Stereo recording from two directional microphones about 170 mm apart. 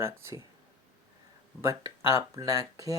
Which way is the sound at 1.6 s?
15° right (ahead or behind).